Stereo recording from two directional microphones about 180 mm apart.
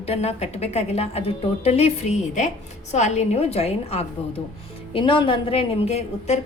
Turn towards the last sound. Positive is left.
turn(degrees=40)  # may be behind; listen again after turning